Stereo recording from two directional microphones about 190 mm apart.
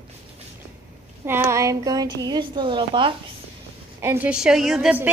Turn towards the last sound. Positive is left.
turn(degrees=-5)  # may be behind; listen again after turning